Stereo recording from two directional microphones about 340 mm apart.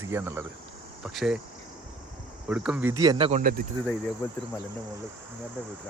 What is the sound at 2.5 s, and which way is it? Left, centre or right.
Speech, centre.